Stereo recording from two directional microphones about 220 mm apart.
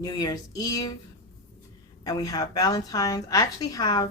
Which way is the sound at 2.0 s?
15° left (ahead or behind).